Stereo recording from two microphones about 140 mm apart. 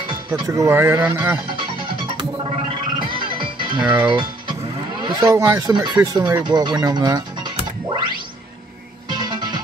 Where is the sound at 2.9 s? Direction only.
35° right (ahead or behind).